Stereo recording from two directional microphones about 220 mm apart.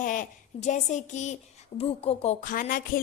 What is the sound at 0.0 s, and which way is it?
A woman's voice, 35° left (ahead or behind).